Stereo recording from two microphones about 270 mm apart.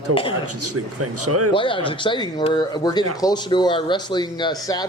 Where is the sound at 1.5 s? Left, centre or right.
Centre.